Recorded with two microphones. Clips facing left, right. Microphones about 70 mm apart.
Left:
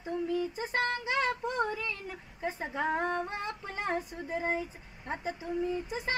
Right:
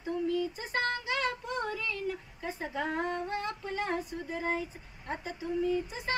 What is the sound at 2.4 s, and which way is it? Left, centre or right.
Female singing, left.